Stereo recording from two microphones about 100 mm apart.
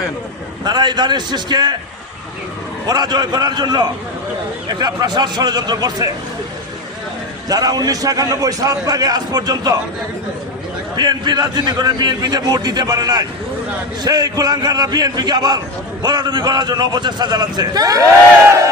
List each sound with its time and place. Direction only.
0.6 s a man's voice: 45° right (ahead or behind)
2.8 s a man's voice: 45° right (ahead or behind)
7.4 s a man's voice: 40° right (ahead or behind)
10.9 s a man's voice: 45° right (ahead or behind)